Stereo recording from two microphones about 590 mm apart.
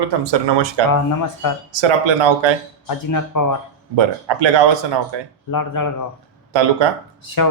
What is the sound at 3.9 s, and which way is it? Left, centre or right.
Speech, right.